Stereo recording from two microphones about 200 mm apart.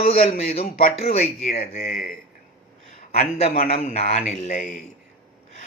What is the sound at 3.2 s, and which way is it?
A man's voice, 40° left (ahead or behind).